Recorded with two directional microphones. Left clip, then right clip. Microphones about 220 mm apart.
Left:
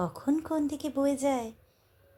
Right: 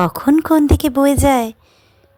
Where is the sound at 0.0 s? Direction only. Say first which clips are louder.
Right 16 dB; 45° right (ahead or behind).